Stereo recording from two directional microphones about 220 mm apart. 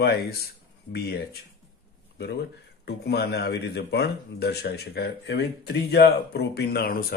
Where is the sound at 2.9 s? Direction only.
50° left (ahead or behind).